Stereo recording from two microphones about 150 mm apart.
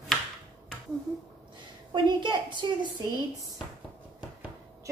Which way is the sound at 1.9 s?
30° right (ahead or behind).